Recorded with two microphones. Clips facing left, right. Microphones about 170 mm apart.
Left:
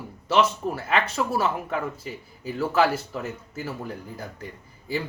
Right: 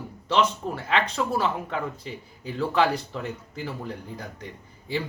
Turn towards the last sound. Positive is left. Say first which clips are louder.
# even
turn(degrees=5)  # may be behind; listen again after turning